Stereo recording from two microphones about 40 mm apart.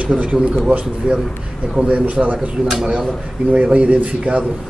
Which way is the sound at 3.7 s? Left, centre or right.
Right.